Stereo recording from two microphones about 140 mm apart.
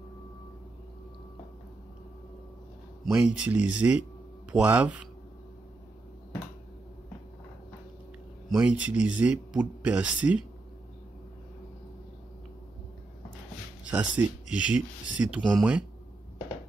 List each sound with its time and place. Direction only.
3.1 s speech: 5° right (ahead or behind)
8.5 s speech: 5° right (ahead or behind)
13.8 s speech: 10° right (ahead or behind)